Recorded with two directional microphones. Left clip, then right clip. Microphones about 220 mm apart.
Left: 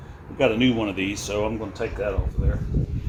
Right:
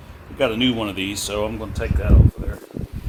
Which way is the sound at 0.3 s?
30° right (ahead or behind).